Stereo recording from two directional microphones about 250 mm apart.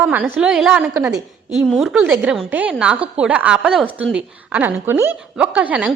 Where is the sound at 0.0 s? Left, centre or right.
Centre.